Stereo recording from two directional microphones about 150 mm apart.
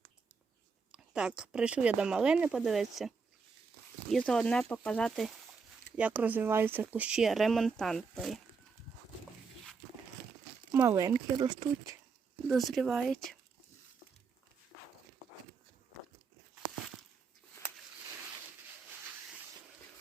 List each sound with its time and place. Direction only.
0.9 s speech: 5° right (ahead or behind)
4.1 s speech: 5° left (ahead or behind)
10.7 s speech: 15° right (ahead or behind)
12.5 s speech: centre (ahead or behind)